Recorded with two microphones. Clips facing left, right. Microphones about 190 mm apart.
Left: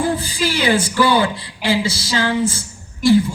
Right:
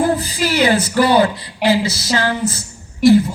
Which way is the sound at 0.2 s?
30° left (ahead or behind).